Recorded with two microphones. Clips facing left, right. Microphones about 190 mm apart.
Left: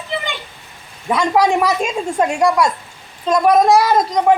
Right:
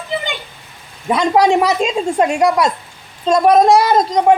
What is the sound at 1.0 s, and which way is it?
A child's voice, 20° right (ahead or behind).